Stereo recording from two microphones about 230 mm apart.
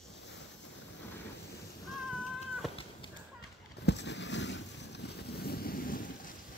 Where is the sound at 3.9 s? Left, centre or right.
Left.